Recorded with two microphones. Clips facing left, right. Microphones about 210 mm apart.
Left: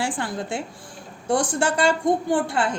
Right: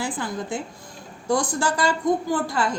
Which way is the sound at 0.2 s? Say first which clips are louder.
Even; 75° left (ahead or behind).